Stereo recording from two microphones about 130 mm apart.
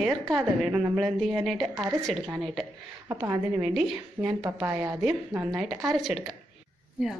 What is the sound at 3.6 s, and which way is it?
Speech, 5° right (ahead or behind).